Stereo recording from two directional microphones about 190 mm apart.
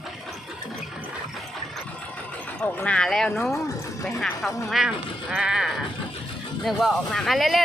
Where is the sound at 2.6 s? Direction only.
5° left (ahead or behind).